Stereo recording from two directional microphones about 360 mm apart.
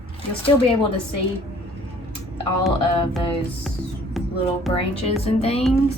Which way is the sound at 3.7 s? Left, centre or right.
Centre.